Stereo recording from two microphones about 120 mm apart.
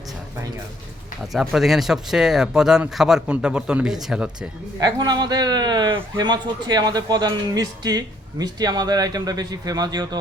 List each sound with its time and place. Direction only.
1.3 s speech: centre (ahead or behind)
4.8 s speech: 35° right (ahead or behind)